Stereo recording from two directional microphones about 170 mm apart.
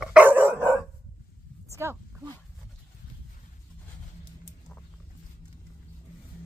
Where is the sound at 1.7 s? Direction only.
15° right (ahead or behind).